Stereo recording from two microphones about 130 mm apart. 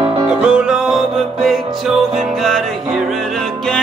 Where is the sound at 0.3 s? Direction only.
5° right (ahead or behind).